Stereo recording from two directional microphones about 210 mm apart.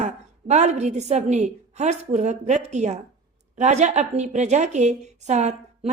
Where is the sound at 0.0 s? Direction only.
35° right (ahead or behind).